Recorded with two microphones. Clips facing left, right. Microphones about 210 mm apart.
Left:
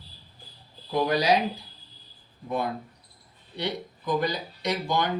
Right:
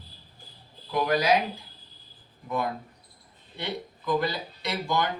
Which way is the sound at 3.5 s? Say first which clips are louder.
Left 3 dB; 15° left (ahead or behind).